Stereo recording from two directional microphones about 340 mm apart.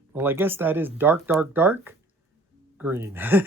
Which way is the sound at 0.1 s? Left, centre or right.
Centre.